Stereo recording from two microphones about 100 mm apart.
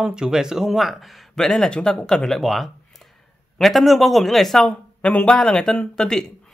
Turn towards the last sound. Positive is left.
turn(degrees=5)  # may be behind; listen again after turning